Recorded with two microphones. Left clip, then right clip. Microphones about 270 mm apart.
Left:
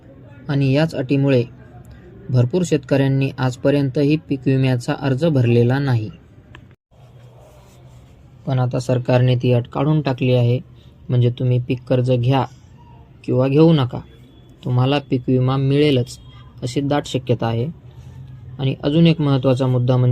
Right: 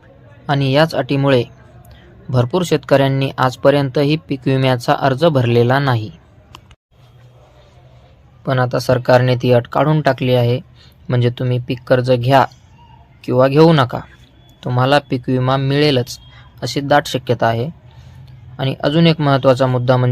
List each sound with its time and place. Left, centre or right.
0.4 s speech: right
8.4 s speech: right